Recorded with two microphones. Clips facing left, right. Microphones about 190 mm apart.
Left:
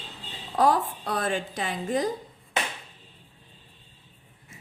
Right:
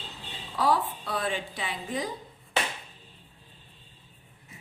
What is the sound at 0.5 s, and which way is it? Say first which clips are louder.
A woman's voice: left 3 dB; 45° left (ahead or behind).